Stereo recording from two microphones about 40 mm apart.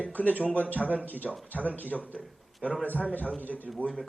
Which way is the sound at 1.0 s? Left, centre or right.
Left.